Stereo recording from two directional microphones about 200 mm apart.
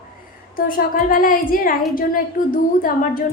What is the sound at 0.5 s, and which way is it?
A woman's voice, 45° left (ahead or behind).